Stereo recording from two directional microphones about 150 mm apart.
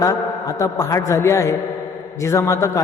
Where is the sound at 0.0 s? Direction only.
25° left (ahead or behind).